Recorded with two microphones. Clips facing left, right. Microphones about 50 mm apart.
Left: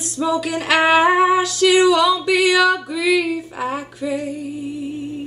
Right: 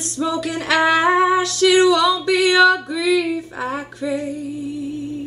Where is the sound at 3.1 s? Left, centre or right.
Centre.